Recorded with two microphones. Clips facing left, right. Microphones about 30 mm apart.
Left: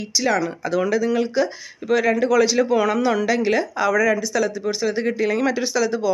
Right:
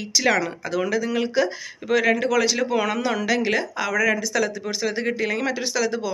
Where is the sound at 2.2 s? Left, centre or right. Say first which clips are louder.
Left 4 dB; right.